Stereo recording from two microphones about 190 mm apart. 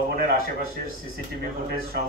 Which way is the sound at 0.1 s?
50° right (ahead or behind).